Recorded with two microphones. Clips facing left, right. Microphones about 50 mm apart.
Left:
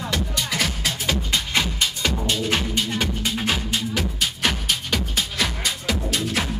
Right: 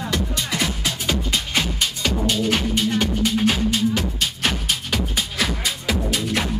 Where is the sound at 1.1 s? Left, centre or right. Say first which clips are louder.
Right 1 dB; left.